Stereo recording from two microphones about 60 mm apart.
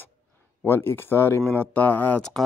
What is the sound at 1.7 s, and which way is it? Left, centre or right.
Speech, left.